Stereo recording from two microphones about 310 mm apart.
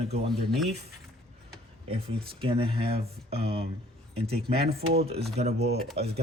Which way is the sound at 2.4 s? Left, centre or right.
Centre.